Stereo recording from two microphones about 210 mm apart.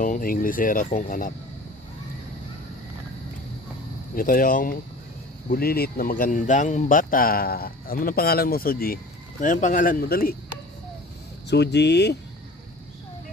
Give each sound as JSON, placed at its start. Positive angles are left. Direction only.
{"t": 0.0, "sound": "speech", "side_deg": 40}
{"t": 4.1, "sound": "speech", "side_deg": 40}
{"t": 11.5, "sound": "speech", "side_deg": 55}